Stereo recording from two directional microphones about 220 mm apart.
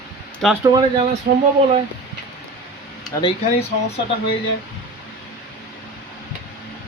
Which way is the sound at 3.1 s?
15° left (ahead or behind).